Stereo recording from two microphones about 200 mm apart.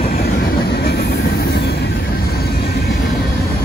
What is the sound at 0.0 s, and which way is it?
Train, 50° left (ahead or behind).